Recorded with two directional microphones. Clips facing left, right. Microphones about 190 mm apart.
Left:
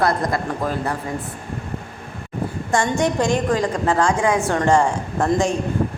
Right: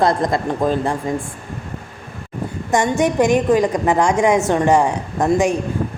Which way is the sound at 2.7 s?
15° right (ahead or behind).